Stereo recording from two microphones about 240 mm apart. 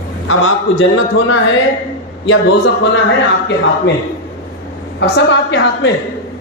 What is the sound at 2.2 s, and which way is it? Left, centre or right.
Speech, left.